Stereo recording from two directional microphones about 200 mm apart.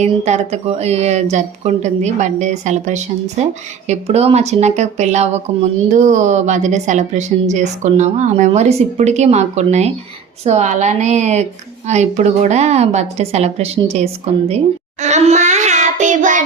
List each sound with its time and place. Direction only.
0.0 s a woman's voice: 35° right (ahead or behind)
15.0 s child singing: 35° right (ahead or behind)